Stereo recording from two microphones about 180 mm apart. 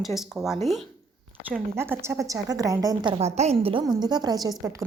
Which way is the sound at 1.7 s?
15° right (ahead or behind).